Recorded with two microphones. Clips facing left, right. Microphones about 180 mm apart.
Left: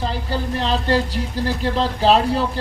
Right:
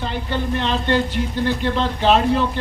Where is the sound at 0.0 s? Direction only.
35° left (ahead or behind).